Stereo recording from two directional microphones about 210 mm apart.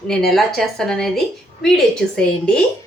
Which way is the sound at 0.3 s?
Centre (ahead or behind).